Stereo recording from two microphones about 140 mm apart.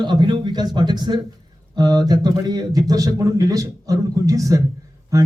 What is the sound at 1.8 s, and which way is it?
A man's voice, 30° right (ahead or behind).